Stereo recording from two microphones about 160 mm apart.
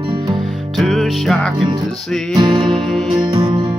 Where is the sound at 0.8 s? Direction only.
Centre (ahead or behind).